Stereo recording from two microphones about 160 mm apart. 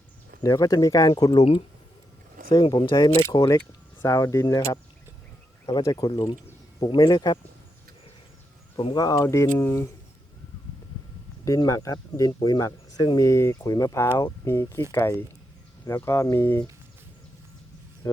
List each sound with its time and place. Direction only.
0.4 s speech: 20° left (ahead or behind)
2.5 s speech: 30° left (ahead or behind)
8.8 s speech: 25° left (ahead or behind)
11.4 s speech: 20° left (ahead or behind)
18.0 s speech: 20° left (ahead or behind)